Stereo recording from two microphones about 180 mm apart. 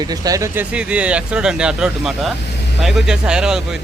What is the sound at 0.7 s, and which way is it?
Speech, 5° right (ahead or behind).